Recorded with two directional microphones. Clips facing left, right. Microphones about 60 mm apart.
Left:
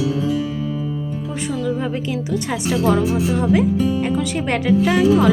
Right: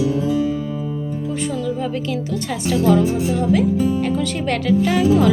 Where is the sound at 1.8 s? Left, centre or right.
Centre.